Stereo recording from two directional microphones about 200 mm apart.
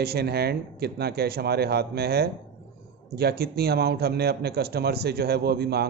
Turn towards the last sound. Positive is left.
turn(degrees=-55)  # may be behind; listen again after turning